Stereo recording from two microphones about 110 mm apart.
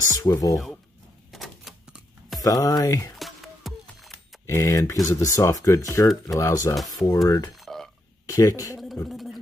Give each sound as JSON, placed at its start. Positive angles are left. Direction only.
{"t": 0.1, "sound": "speech", "side_deg": 30}
{"t": 1.3, "sound": "typewriter", "side_deg": 0}
{"t": 2.4, "sound": "speech", "side_deg": 35}
{"t": 3.2, "sound": "music", "side_deg": 0}
{"t": 4.5, "sound": "speech", "side_deg": 30}
{"t": 6.7, "sound": "speech", "side_deg": 0}
{"t": 7.2, "sound": "speech", "side_deg": 35}
{"t": 7.5, "sound": "a sound", "side_deg": 0}
{"t": 8.3, "sound": "speech", "side_deg": 30}
{"t": 9.1, "sound": "a sound", "side_deg": 0}